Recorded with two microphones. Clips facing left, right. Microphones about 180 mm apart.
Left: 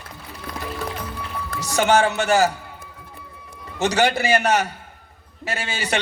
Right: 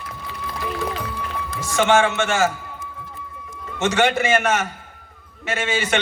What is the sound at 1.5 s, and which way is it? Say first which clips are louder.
A man's voice: right 1 dB; 40° left (ahead or behind).